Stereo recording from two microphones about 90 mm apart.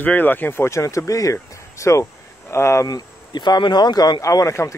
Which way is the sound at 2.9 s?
50° left (ahead or behind).